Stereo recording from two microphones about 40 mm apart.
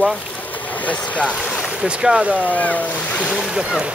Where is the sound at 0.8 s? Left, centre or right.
Left.